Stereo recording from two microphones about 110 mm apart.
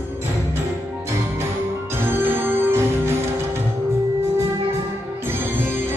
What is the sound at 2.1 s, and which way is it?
Music, 20° right (ahead or behind).